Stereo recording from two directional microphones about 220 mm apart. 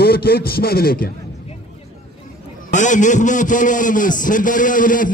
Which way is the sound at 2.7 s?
35° left (ahead or behind).